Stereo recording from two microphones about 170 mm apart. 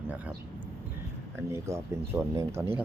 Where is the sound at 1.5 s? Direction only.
15° right (ahead or behind).